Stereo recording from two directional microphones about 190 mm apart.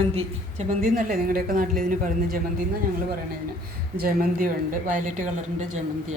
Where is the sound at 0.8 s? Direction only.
50° right (ahead or behind).